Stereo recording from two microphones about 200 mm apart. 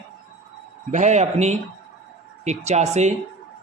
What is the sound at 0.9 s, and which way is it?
Speech, 35° right (ahead or behind).